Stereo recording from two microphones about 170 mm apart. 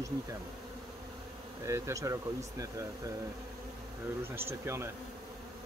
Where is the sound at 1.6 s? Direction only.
15° right (ahead or behind).